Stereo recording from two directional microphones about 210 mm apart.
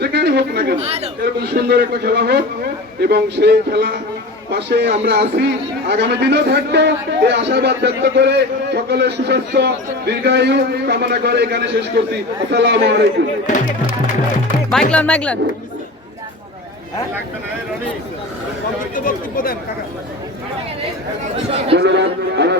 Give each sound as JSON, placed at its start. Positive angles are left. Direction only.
{"t": 0.0, "sound": "chatter", "side_deg": -50}
{"t": 0.8, "sound": "speech", "side_deg": -30}
{"t": 1.2, "sound": "a man's voice", "side_deg": -50}
{"t": 14.7, "sound": "speech", "side_deg": 5}
{"t": 18.9, "sound": "speech", "side_deg": 40}
{"t": 21.8, "sound": "a man's voice", "side_deg": -55}